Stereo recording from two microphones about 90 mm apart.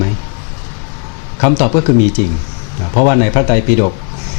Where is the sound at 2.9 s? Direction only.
20° left (ahead or behind).